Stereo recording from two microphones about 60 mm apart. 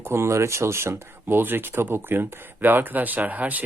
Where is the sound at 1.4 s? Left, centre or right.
Right.